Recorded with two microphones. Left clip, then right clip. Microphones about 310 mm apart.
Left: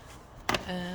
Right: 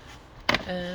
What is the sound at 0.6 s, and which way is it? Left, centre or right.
Speech, centre.